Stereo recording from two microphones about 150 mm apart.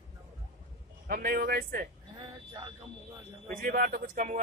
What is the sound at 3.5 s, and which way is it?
Speech, 70° right (ahead or behind).